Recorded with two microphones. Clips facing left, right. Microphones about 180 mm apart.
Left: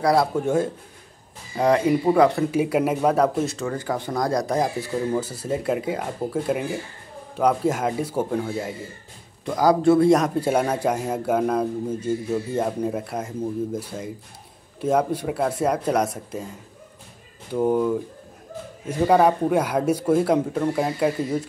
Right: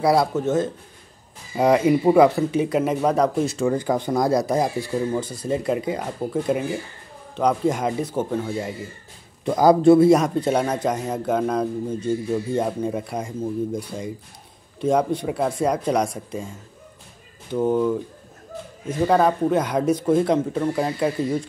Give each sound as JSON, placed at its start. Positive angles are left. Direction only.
{"t": 0.0, "sound": "speech", "side_deg": -5}
{"t": 0.4, "sound": "speech", "side_deg": 10}
{"t": 1.6, "sound": "speech", "side_deg": -10}
{"t": 2.5, "sound": "speech", "side_deg": 10}
{"t": 3.5, "sound": "speech", "side_deg": -15}
{"t": 9.4, "sound": "a man's voice", "side_deg": -20}
{"t": 9.9, "sound": "speech", "side_deg": 0}
{"t": 17.5, "sound": "speech", "side_deg": 10}